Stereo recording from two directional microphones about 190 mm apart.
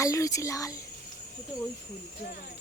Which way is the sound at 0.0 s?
15° left (ahead or behind).